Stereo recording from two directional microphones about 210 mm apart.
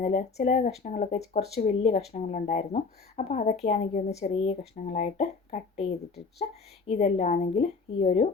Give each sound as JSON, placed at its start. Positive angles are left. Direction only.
{"t": 0.0, "sound": "speech", "side_deg": 30}